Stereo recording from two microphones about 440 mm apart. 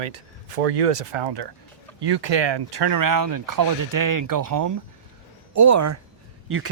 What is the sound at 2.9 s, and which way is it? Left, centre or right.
Speech, right.